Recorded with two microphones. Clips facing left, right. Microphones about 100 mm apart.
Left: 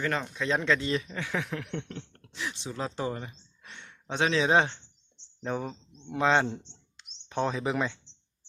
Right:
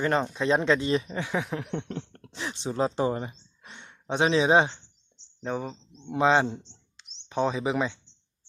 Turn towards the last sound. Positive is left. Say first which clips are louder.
# right 2 dB
turn(degrees=-5)  # may be behind; listen again after turning